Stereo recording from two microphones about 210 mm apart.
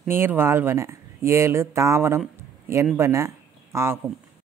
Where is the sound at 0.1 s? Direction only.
10° right (ahead or behind).